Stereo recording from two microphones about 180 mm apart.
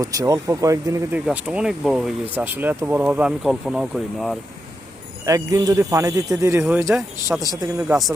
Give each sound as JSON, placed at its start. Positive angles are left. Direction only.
{"t": 0.0, "sound": "speech", "side_deg": -20}
{"t": 5.2, "sound": "speech", "side_deg": -20}